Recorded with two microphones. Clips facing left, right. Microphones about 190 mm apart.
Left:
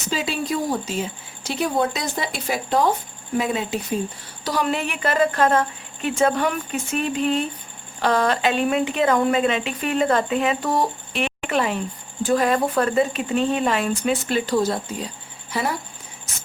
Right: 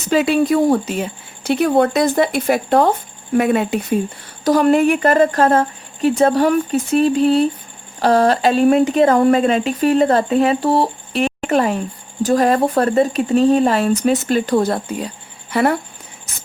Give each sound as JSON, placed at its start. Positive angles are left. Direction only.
{"t": 0.1, "sound": "speech", "side_deg": -60}
{"t": 4.4, "sound": "speech", "side_deg": -50}